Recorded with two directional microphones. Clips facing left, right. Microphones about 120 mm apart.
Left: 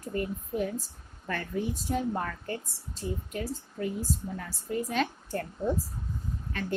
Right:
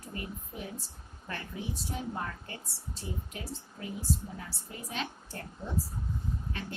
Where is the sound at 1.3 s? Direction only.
45° left (ahead or behind).